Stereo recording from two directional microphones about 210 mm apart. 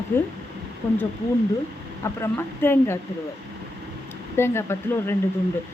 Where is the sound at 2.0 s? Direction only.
10° left (ahead or behind).